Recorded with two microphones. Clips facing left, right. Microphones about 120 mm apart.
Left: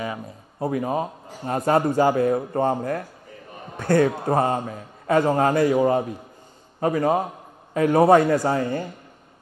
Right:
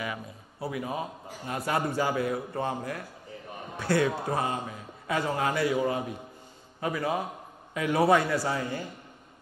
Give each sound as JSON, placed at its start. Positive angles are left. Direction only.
{"t": 0.6, "sound": "a man's voice", "side_deg": 45}